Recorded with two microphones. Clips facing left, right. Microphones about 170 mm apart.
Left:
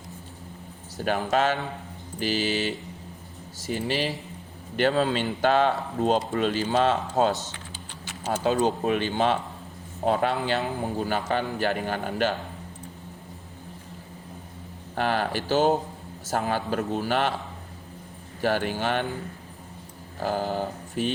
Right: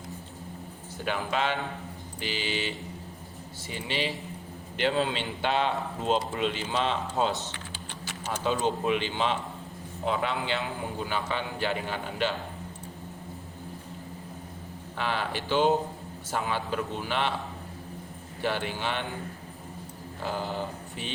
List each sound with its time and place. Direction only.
0.9 s speech: 45° left (ahead or behind)
14.9 s speech: 45° left (ahead or behind)
18.4 s speech: 45° left (ahead or behind)
20.1 s mantra: 45° left (ahead or behind)